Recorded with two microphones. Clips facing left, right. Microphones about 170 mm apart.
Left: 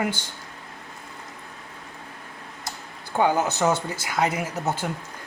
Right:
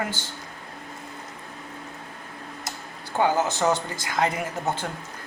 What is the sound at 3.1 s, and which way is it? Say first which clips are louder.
Speech: left 1 dB; 10° left (ahead or behind).